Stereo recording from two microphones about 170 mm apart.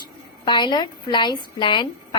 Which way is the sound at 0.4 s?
25° left (ahead or behind).